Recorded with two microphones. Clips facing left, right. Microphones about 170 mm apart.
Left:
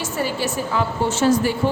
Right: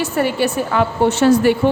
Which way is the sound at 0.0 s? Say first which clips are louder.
Right 6 dB; 65° right (ahead or behind).